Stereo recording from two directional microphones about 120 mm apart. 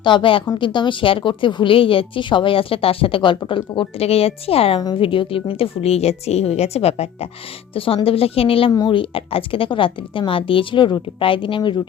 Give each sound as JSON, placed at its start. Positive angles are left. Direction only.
{"t": 0.0, "sound": "a woman's voice", "side_deg": 40}
{"t": 7.7, "sound": "a woman's voice", "side_deg": 50}